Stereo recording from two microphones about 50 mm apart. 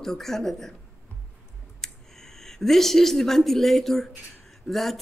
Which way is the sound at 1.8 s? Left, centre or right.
Centre.